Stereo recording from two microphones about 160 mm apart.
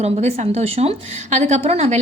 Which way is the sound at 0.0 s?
45° right (ahead or behind).